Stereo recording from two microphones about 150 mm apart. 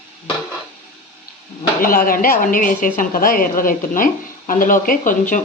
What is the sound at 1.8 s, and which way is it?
Speech, 70° left (ahead or behind).